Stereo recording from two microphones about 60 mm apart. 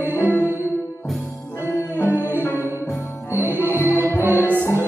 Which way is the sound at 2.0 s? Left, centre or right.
Right.